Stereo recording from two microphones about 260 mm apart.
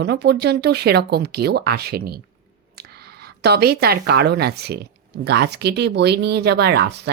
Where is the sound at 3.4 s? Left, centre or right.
Right.